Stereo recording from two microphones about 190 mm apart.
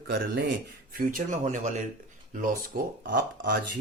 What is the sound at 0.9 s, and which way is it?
Speech, 45° right (ahead or behind).